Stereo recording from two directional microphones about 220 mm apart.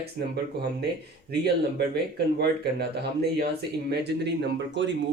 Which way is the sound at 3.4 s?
50° right (ahead or behind).